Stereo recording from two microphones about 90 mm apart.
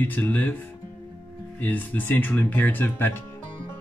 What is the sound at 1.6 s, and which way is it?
Speech, 20° left (ahead or behind).